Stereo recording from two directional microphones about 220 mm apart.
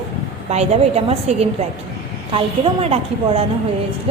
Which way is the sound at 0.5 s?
30° right (ahead or behind).